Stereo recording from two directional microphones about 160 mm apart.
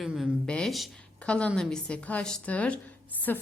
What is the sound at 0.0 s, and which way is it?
A woman's voice, centre (ahead or behind).